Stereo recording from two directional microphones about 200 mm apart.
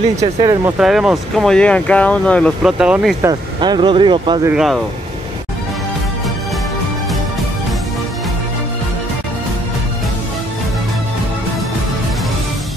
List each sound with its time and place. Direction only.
0.4 s speech: 20° right (ahead or behind)
0.7 s speech: centre (ahead or behind)
3.2 s speech: 20° right (ahead or behind)
4.5 s speech: centre (ahead or behind)